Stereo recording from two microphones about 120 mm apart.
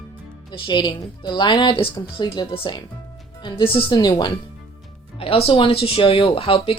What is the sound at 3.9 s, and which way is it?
Speech, 35° left (ahead or behind).